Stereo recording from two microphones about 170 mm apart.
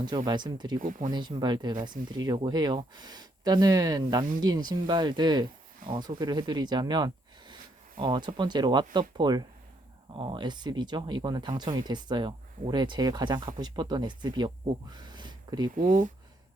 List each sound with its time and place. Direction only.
0.3 s speech: 25° right (ahead or behind)
0.8 s speech: 50° right (ahead or behind)
1.1 s speech: 25° right (ahead or behind)
15.7 s speech: 50° right (ahead or behind)